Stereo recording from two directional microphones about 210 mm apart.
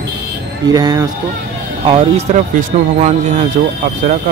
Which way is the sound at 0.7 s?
20° right (ahead or behind).